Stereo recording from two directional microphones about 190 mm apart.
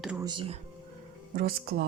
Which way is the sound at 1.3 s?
50° right (ahead or behind).